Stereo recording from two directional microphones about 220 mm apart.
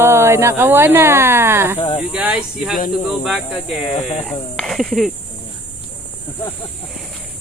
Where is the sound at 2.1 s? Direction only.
5° right (ahead or behind).